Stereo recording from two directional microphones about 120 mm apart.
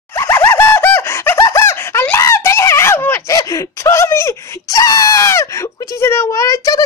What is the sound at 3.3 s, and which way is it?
Screaming, 30° left (ahead or behind).